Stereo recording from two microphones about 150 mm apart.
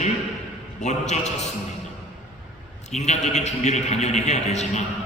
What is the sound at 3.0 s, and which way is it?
A man's voice, 50° left (ahead or behind).